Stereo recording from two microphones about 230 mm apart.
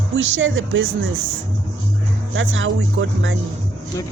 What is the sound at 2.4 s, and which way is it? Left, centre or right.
Speech, right.